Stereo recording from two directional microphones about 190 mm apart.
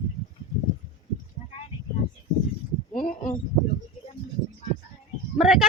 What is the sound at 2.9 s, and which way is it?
Speech, 45° left (ahead or behind).